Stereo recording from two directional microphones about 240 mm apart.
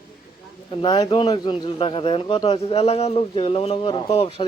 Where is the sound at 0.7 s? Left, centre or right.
Centre.